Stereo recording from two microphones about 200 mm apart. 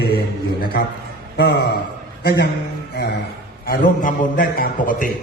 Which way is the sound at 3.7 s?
45° left (ahead or behind).